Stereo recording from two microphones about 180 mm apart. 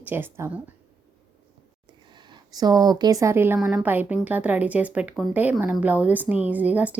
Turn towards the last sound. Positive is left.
turn(degrees=-10)  # may be behind; listen again after turning